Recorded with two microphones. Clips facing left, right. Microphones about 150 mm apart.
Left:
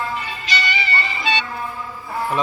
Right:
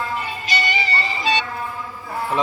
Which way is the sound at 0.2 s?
50° right (ahead or behind).